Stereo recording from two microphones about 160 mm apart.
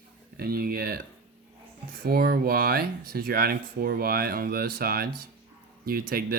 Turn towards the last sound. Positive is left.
turn(degrees=-65)  # may be behind; listen again after turning